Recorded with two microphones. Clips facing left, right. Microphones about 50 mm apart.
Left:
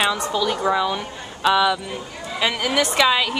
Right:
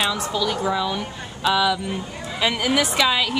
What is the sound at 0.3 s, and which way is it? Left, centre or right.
A woman's voice, centre.